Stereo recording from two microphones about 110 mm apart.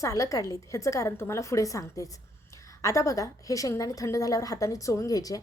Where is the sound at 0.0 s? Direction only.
30° left (ahead or behind).